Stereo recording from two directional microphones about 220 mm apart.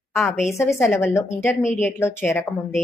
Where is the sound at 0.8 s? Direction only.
10° left (ahead or behind).